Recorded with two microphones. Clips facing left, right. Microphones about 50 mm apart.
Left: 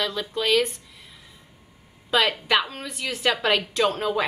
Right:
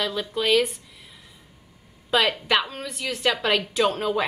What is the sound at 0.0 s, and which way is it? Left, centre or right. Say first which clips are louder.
Speech: right 1 dB; centre.